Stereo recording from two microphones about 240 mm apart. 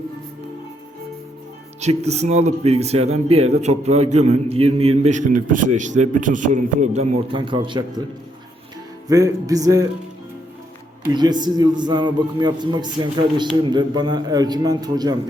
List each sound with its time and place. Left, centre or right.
1.8 s speech: right
9.0 s a man's voice: centre
11.1 s a man's voice: centre